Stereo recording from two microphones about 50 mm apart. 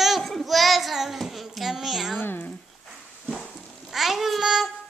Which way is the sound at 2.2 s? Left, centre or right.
Left.